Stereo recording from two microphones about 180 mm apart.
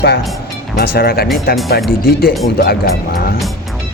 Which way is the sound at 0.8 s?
60° left (ahead or behind).